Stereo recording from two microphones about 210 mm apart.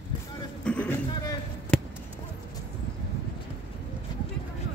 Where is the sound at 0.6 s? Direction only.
5° left (ahead or behind).